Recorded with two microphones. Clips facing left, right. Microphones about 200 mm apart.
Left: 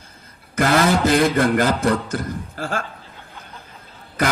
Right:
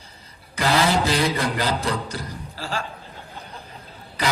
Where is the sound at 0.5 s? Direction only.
50° left (ahead or behind).